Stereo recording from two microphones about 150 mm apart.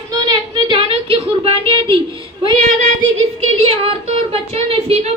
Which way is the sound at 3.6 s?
40° right (ahead or behind).